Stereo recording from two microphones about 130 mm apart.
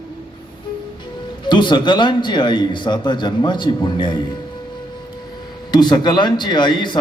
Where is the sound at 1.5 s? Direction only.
35° left (ahead or behind).